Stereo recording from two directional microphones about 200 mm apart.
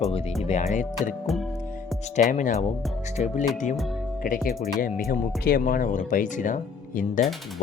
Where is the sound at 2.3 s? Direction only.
40° left (ahead or behind).